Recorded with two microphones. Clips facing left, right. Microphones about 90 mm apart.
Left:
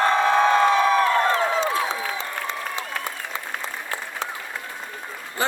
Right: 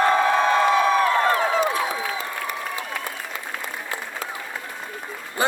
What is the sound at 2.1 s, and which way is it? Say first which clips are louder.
Applause: even; 25° left (ahead or behind).